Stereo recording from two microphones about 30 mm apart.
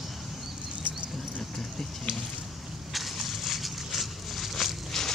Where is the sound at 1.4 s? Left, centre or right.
Centre.